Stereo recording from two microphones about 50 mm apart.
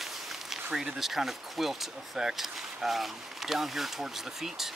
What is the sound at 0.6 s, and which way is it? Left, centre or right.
Speech, centre.